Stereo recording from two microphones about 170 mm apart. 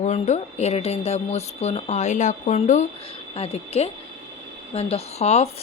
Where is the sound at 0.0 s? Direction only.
40° left (ahead or behind).